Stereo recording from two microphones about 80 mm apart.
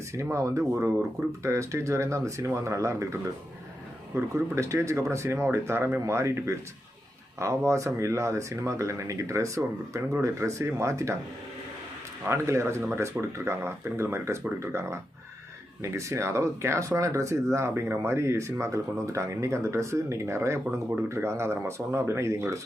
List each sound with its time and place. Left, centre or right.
0.1 s speech: right
12.3 s speech: right